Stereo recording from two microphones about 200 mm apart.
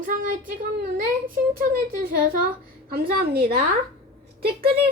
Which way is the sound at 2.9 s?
50° right (ahead or behind).